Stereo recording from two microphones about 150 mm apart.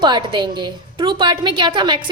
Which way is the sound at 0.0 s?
30° right (ahead or behind).